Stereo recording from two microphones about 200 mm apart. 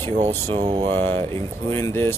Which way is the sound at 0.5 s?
25° right (ahead or behind).